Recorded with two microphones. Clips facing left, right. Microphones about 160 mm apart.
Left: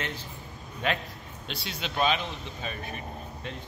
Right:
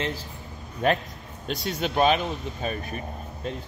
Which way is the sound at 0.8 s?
45° right (ahead or behind).